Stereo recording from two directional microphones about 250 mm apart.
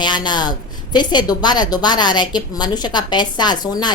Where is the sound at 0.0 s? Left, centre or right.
Centre.